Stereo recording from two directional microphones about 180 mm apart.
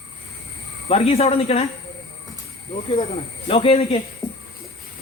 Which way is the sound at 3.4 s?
35° left (ahead or behind).